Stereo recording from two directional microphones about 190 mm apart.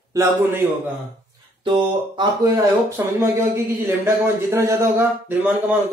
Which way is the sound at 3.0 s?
15° right (ahead or behind).